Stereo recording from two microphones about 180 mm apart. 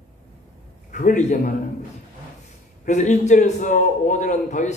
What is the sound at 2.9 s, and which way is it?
A man's voice, 40° left (ahead or behind).